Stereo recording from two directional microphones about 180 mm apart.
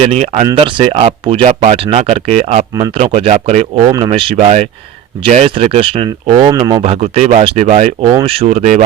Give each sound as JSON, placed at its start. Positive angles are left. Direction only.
{"t": 0.0, "sound": "speech", "side_deg": -35}
{"t": 3.9, "sound": "speech", "side_deg": -30}
{"t": 6.8, "sound": "speech", "side_deg": -35}